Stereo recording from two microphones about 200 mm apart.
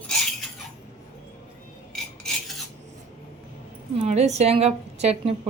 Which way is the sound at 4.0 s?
35° right (ahead or behind).